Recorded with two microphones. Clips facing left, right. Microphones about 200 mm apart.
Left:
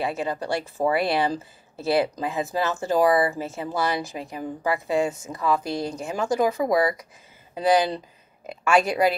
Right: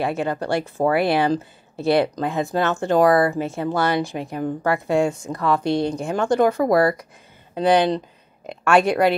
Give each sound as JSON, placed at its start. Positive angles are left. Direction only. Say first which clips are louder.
{"t": 0.0, "sound": "speech", "louder": "right 4 dB", "side_deg": 0}
{"t": 6.6, "sound": "speech", "louder": "right 4 dB", "side_deg": -55}
{"t": 7.6, "sound": "speech", "louder": "right 3 dB", "side_deg": 5}